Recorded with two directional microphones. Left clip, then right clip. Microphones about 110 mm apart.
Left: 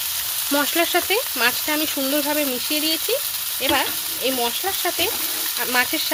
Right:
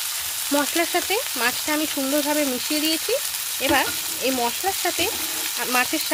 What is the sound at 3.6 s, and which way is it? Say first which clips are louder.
Speech: even; 25° right (ahead or behind).